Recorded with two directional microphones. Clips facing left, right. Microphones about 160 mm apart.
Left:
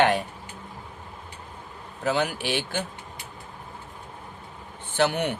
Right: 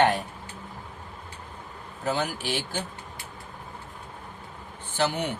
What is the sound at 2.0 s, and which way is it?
Speech, 75° left (ahead or behind).